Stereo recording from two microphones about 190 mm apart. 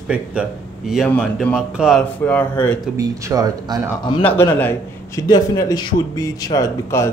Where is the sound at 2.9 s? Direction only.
15° right (ahead or behind).